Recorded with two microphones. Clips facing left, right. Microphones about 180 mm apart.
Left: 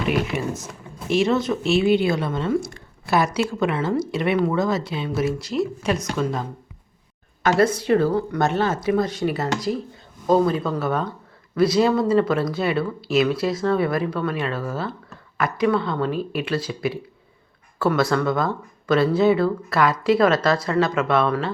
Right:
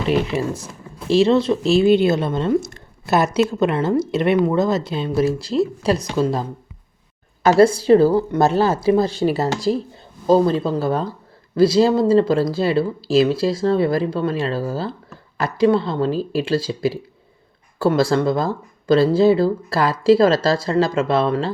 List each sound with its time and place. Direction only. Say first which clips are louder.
0.1 s speech: right 5 dB; 30° right (ahead or behind)
3.8 s speech: right 4 dB; 20° right (ahead or behind)
5.0 s speech: right 6 dB; 35° right (ahead or behind)
7.4 s speech: right 6 dB; 30° right (ahead or behind)